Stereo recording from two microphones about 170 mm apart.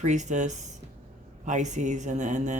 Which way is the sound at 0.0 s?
45° right (ahead or behind).